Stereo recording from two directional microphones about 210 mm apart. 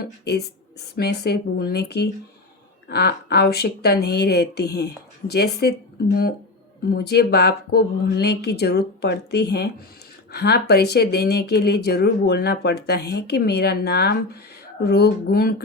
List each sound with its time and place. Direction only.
0.0 s speech: 50° left (ahead or behind)
6.9 s speech: 50° left (ahead or behind)